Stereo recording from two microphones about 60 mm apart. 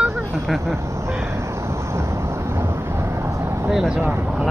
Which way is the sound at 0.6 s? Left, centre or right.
Right.